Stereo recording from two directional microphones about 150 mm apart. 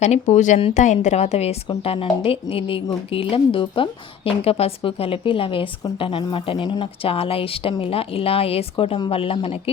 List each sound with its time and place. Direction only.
0.0 s a woman's voice: 50° left (ahead or behind)